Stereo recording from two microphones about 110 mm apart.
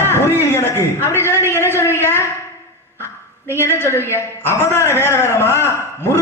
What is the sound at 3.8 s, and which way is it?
A man's voice, 20° left (ahead or behind).